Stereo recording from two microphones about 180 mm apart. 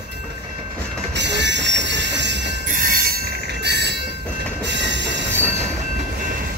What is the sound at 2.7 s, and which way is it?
Train, 50° right (ahead or behind).